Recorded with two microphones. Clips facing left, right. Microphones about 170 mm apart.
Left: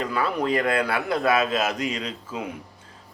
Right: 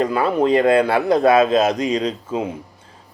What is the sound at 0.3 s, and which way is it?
Speech, 25° right (ahead or behind).